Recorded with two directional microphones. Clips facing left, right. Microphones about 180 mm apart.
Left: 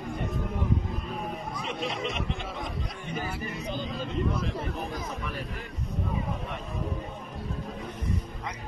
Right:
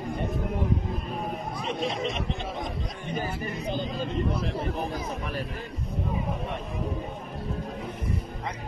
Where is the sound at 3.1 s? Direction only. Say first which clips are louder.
Right 3 dB; 30° right (ahead or behind).